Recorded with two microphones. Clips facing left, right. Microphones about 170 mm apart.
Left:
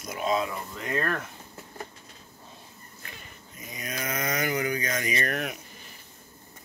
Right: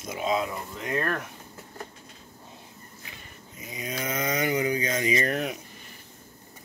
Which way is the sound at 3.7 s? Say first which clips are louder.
Right 2 dB; 25° right (ahead or behind).